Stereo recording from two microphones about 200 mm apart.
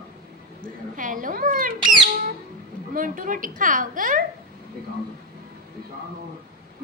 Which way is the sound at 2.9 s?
45° right (ahead or behind).